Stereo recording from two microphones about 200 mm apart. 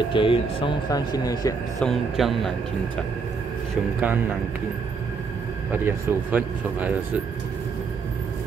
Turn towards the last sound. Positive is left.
turn(degrees=-5)  # may be behind; listen again after turning